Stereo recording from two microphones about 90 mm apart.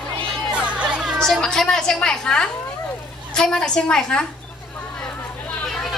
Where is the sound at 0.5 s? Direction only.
15° right (ahead or behind).